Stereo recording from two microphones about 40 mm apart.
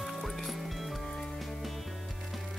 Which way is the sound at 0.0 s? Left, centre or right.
Centre.